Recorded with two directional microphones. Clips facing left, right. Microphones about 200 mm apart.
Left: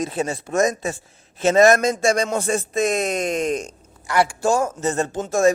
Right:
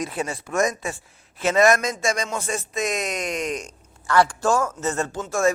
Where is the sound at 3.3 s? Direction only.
40° left (ahead or behind).